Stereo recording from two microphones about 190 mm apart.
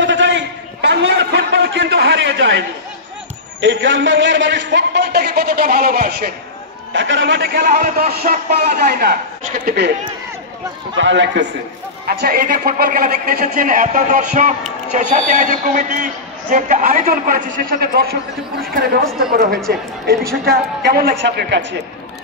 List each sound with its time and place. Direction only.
0.0 s a sound: 70° right (ahead or behind)
3.6 s a man's voice: 75° right (ahead or behind); by 6.3 s 55° right (ahead or behind)
6.9 s a man's voice: 80° right; by 9.9 s 55° right (ahead or behind)
11.0 s a man's voice: 70° right (ahead or behind)
12.1 s a man's voice: 50° right (ahead or behind)
19.7 s a man's voice: 55° right (ahead or behind)